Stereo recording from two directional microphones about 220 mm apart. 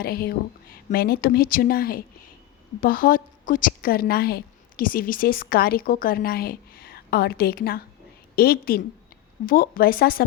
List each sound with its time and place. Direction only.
0.0 s a woman's voice: 45° left (ahead or behind)